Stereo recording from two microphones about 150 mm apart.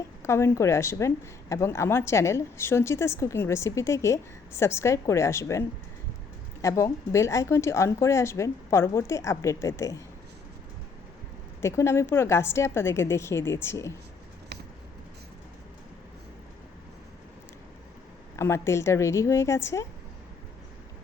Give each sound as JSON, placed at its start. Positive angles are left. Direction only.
{"t": 0.2, "sound": "speech", "side_deg": 15}
{"t": 11.6, "sound": "speech", "side_deg": 20}
{"t": 18.3, "sound": "speech", "side_deg": 20}